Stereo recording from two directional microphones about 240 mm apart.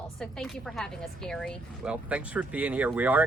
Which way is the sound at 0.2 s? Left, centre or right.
Centre.